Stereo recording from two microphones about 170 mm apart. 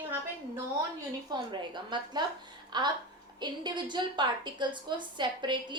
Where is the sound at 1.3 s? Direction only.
25° right (ahead or behind).